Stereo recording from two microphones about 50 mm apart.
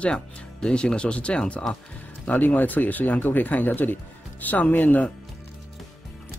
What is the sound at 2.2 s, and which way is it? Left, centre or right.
Speech, left.